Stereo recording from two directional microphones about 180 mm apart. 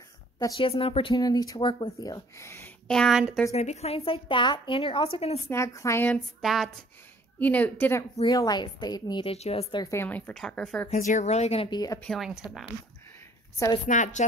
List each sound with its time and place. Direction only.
0.6 s a woman's voice: 30° left (ahead or behind)
1.1 s a woman's voice: 20° left (ahead or behind)
2.9 s a woman's voice: centre (ahead or behind)
3.5 s a woman's voice: 35° left (ahead or behind)
5.5 s a woman's voice: 15° left (ahead or behind)
6.4 s a woman's voice: centre (ahead or behind)
8.3 s a woman's voice: 20° left (ahead or behind); by 10.9 s 5° left (ahead or behind)
10.9 s a woman's voice: 45° left (ahead or behind); by 12.0 s 20° left (ahead or behind)
12.0 s a woman's voice: centre (ahead or behind)
13.8 s a woman's voice: 45° left (ahead or behind)